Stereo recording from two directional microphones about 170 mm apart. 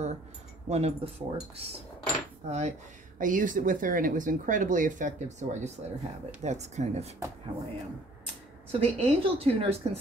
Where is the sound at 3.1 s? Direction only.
50° right (ahead or behind).